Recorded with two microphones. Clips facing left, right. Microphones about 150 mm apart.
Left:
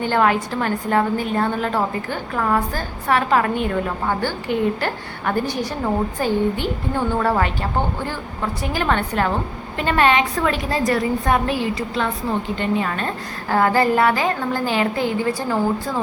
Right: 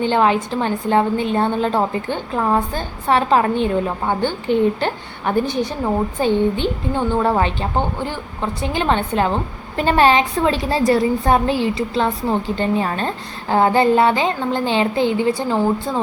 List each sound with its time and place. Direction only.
0.0 s a woman's voice: 20° right (ahead or behind)